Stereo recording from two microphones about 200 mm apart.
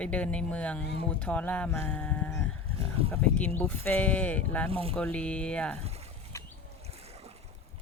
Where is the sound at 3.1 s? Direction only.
5° left (ahead or behind).